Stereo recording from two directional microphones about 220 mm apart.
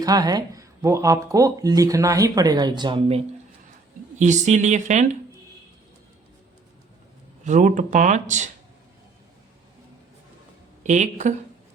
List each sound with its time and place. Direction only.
0.0 s speech: 15° right (ahead or behind)
4.2 s speech: 35° right (ahead or behind)
7.4 s speech: 35° right (ahead or behind)
10.8 s speech: 35° right (ahead or behind)